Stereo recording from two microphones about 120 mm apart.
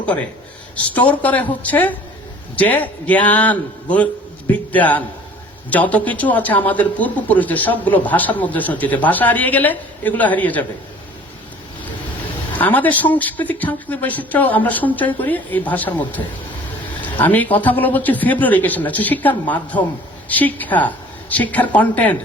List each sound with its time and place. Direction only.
0.0 s a man's voice: 10° left (ahead or behind)
12.5 s a man's voice: 15° left (ahead or behind)